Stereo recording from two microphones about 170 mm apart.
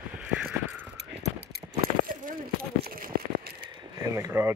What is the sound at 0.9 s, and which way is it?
Keys jangling, 85° right.